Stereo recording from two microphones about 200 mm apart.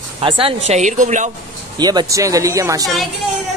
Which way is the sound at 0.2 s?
25° right (ahead or behind).